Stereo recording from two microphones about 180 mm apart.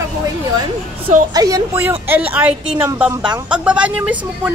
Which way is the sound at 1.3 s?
20° right (ahead or behind).